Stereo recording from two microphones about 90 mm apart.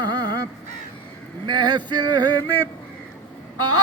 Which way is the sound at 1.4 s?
55° right (ahead or behind).